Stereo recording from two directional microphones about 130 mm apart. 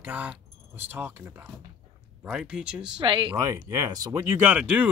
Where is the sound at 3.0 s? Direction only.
40° right (ahead or behind).